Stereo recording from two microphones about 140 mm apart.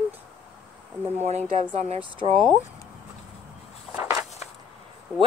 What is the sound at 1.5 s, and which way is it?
Speech, 50° right (ahead or behind).